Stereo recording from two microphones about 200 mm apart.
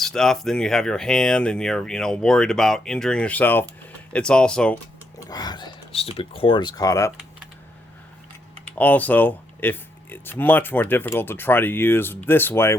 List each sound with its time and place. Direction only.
0.0 s speech: centre (ahead or behind)
5.2 s speech: 20° left (ahead or behind)
8.8 s speech: 10° left (ahead or behind)